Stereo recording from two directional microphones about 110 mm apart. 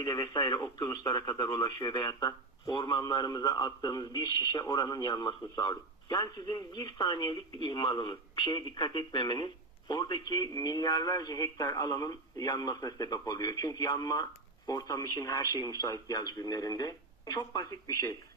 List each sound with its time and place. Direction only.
0.0 s speech: 35° left (ahead or behind)